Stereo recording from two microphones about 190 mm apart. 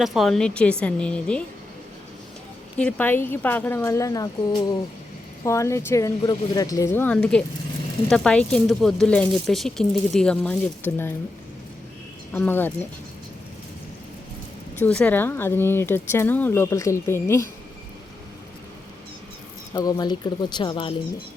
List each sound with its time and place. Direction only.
0.0 s speech: centre (ahead or behind)
2.7 s speech: 10° left (ahead or behind)
12.3 s speech: 10° left (ahead or behind)
14.8 s speech: 5° left (ahead or behind)
19.7 s speech: 20° left (ahead or behind)